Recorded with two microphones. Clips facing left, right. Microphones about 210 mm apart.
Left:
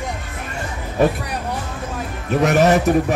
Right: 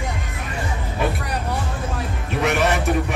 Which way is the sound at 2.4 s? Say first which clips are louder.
Left 6 dB; 40° left (ahead or behind).